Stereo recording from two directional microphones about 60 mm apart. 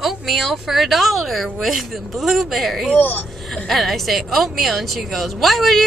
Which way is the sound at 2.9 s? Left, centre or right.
Left.